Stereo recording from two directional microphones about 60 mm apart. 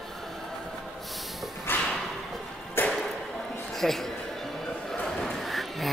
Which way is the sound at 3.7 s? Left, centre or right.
Centre.